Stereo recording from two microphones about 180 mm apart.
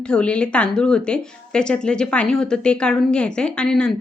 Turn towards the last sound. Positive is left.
turn(degrees=5)  # may be behind; listen again after turning